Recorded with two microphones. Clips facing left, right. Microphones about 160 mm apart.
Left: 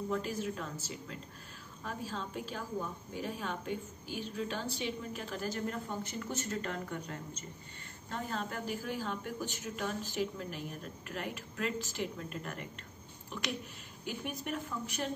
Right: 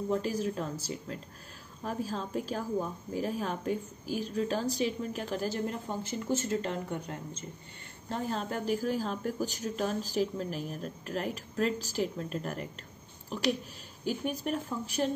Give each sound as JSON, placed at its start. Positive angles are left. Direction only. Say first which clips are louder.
{"t": 0.1, "sound": "a woman's voice", "louder": "right 6 dB", "side_deg": -35}
{"t": 14.0, "sound": "a woman's voice", "louder": "right 7 dB", "side_deg": -35}